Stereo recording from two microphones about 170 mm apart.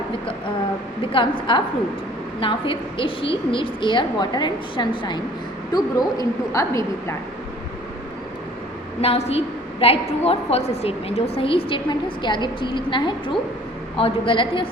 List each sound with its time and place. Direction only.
1.1 s a woman's voice: 30° left (ahead or behind)
9.0 s a woman's voice: 35° left (ahead or behind)